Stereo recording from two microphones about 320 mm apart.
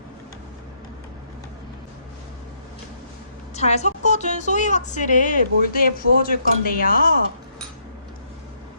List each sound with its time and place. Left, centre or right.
3.5 s a woman's voice: left